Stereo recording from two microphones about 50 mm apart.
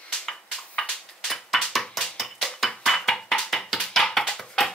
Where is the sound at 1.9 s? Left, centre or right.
Centre.